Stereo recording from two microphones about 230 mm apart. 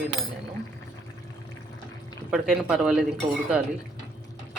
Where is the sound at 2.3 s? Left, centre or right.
Centre.